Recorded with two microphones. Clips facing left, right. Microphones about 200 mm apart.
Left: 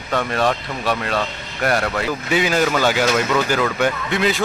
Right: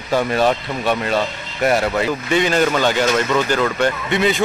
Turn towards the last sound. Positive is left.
turn(degrees=0)  # may be behind; listen again after turning